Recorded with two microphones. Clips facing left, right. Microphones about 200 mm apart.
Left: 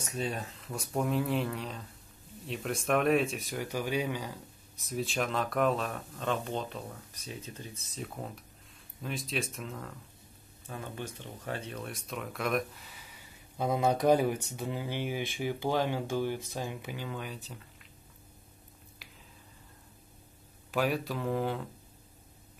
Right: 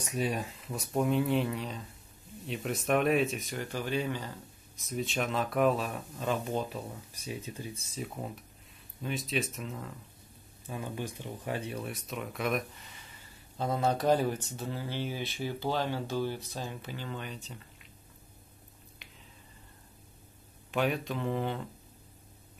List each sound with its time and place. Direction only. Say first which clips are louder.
0.0 s speech: right 3 dB; 10° right (ahead or behind); by 4.4 s 10° left (ahead or behind)
4.8 s speech: even; centre (ahead or behind)
9.0 s speech: right 2 dB; centre (ahead or behind)
10.7 s speech: right 3 dB; 15° right (ahead or behind); by 17.4 s 5° left (ahead or behind)
20.7 s speech: even; centre (ahead or behind)